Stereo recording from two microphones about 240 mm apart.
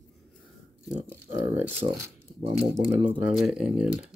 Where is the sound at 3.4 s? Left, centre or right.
Centre.